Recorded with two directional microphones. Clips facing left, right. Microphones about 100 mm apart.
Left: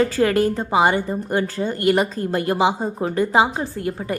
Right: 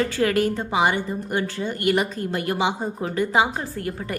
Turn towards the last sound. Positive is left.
turn(degrees=20)  # may be behind; listen again after turning